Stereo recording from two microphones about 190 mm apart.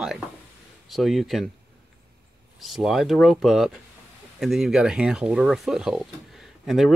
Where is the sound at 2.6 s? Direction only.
Centre (ahead or behind).